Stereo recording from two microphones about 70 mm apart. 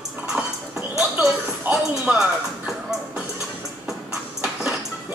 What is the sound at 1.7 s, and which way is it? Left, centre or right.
Music, right.